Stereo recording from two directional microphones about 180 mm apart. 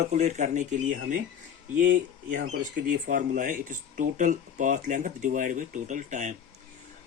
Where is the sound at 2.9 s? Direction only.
50° right (ahead or behind).